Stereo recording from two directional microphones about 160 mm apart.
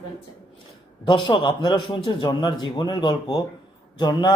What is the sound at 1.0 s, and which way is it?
A man's voice, 30° left (ahead or behind).